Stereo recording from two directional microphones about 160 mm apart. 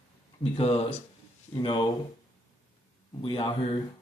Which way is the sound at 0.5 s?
35° left (ahead or behind).